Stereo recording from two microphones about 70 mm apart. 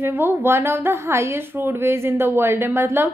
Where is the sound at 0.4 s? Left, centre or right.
Right.